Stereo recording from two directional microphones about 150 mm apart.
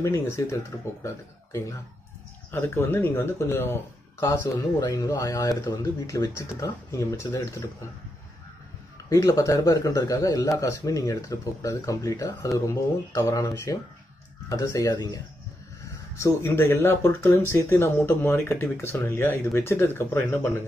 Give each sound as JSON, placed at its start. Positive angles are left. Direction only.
{"t": 0.0, "sound": "speech", "side_deg": 20}
{"t": 9.1, "sound": "speech", "side_deg": 20}